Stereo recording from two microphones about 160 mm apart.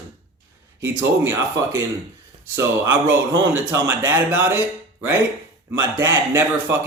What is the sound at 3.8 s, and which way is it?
Speech, 10° right (ahead or behind).